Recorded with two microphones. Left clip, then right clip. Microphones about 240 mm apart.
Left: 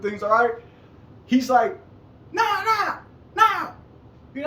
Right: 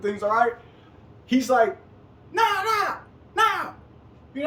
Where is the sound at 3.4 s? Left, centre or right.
Centre.